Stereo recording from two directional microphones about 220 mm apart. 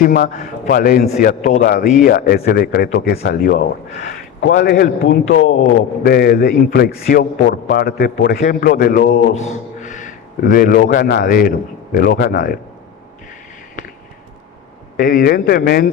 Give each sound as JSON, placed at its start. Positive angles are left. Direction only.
{"t": 0.0, "sound": "a man's voice", "side_deg": 40}
{"t": 4.4, "sound": "a man's voice", "side_deg": 55}
{"t": 14.9, "sound": "a man's voice", "side_deg": 40}